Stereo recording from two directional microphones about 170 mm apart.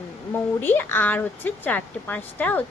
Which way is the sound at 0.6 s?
10° left (ahead or behind).